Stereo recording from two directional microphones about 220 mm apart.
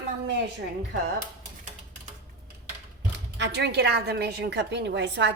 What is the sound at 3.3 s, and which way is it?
A woman's voice, 50° right (ahead or behind).